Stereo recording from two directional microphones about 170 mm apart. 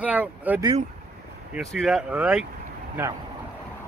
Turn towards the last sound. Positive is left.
turn(degrees=-10)  # may be behind; listen again after turning